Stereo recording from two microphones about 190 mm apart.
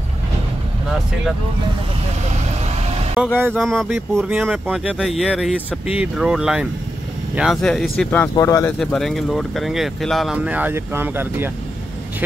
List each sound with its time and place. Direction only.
2.6 s vehicle: 35° right (ahead or behind)
3.3 s speech: 10° right (ahead or behind)
3.6 s speech: centre (ahead or behind)
8.0 s speech: 10° left (ahead or behind)
8.7 s speech: centre (ahead or behind)